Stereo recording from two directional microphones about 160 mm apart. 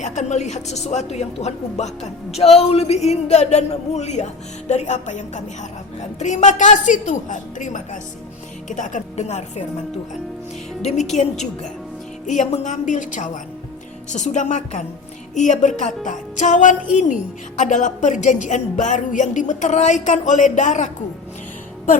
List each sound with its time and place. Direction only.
0.0 s a woman's voice: 45° left (ahead or behind)
11.1 s a woman's voice: 45° left (ahead or behind)